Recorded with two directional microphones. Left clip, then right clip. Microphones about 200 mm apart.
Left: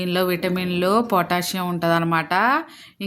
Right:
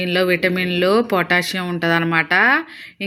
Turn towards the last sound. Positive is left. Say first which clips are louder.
# right 4 dB
turn(degrees=5)  # may be behind; listen again after turning